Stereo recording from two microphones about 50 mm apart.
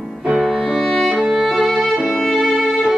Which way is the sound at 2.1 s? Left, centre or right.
Centre.